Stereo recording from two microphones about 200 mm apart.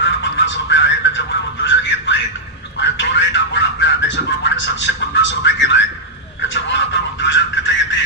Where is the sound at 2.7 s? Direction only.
60° left (ahead or behind).